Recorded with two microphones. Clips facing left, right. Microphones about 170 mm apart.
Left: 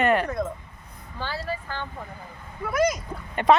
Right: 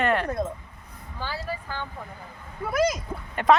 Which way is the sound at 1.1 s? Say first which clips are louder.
Left 2 dB; 10° right (ahead or behind).